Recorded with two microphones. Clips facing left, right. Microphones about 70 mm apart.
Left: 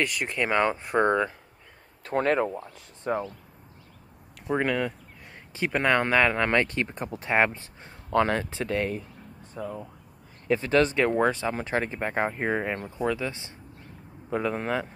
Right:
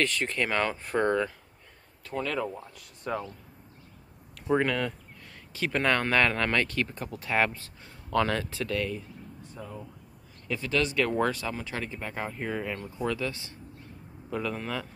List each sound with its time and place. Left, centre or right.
0.0 s speech: centre
2.0 s speech: left
2.7 s speech: left
4.4 s speech: centre; by 8.9 s left
9.5 s speech: left
11.5 s speech: left
13.0 s speech: left